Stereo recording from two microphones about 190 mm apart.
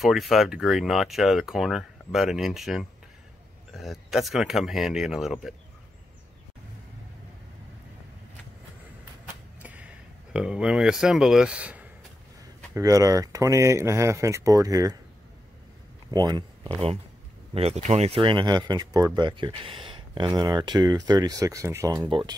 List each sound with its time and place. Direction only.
0.0 s speech: centre (ahead or behind)
9.6 s a sound: 5° right (ahead or behind)
12.7 s speech: 15° right (ahead or behind)
16.1 s speech: 20° right (ahead or behind)
17.6 s speech: 35° right (ahead or behind)